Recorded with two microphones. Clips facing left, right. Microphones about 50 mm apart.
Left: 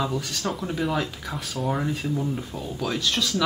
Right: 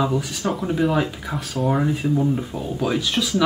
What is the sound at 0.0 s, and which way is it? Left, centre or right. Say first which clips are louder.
Speech: right 5 dB; centre.